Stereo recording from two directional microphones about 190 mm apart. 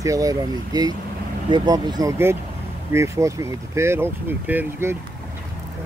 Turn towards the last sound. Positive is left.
turn(degrees=-10)  # may be behind; listen again after turning